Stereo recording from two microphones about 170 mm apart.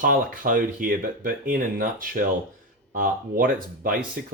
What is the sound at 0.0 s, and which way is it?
Speech, 55° right (ahead or behind).